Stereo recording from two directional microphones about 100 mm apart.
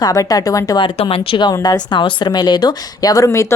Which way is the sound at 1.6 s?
45° left (ahead or behind).